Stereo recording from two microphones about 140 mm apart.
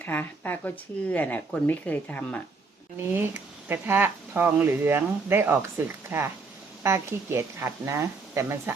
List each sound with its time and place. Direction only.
0.0 s speech: 10° left (ahead or behind)
3.0 s a woman's voice: 15° right (ahead or behind)